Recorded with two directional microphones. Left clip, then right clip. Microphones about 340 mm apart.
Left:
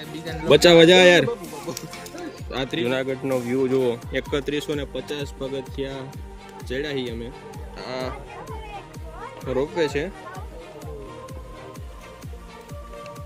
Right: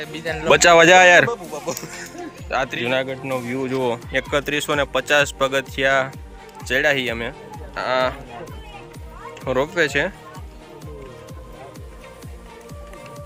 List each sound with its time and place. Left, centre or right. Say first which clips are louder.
0.5 s speech: right 2 dB; centre
2.5 s speech: right 4 dB; centre
5.2 s speech: right 11 dB; centre
6.7 s speech: right 9 dB; centre
9.7 s speech: right 6 dB; centre